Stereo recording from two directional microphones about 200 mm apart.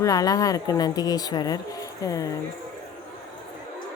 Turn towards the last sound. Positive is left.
turn(degrees=15)  # may be behind; listen again after turning